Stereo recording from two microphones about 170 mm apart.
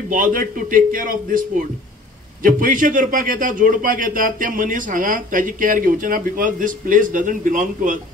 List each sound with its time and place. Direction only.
0.1 s a man's voice: 55° right (ahead or behind)